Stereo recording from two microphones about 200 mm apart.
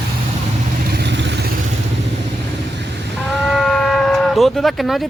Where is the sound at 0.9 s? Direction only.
60° right (ahead or behind).